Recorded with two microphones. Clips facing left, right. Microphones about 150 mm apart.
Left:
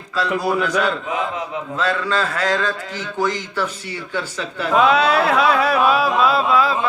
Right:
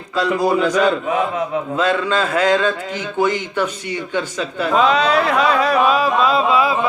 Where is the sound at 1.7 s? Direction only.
15° right (ahead or behind).